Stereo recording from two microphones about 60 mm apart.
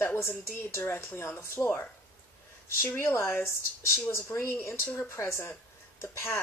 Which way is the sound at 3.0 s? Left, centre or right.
Left.